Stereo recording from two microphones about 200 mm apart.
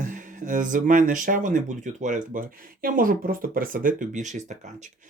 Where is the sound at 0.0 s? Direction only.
40° right (ahead or behind).